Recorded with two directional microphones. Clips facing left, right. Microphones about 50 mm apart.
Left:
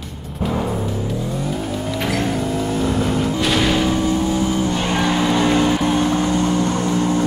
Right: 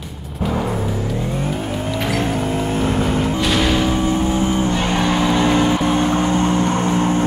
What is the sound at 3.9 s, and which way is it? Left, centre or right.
Vehicle, right.